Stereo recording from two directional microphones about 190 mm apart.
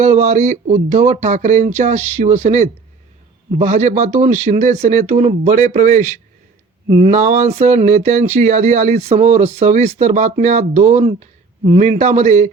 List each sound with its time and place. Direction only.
0.0 s speech: 35° right (ahead or behind)